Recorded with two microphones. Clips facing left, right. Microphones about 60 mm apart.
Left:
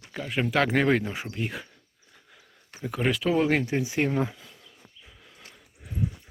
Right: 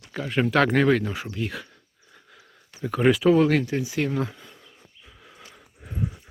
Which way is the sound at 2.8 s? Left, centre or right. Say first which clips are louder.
Right 7 dB; centre.